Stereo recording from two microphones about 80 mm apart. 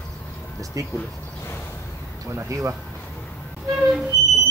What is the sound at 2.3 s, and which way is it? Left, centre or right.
Speech, right.